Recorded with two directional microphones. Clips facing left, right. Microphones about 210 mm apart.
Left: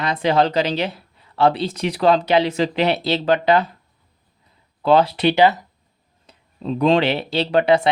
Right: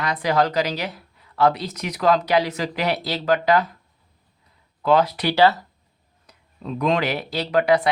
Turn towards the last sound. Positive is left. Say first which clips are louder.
# left 2 dB
turn(degrees=25)  # may be behind; listen again after turning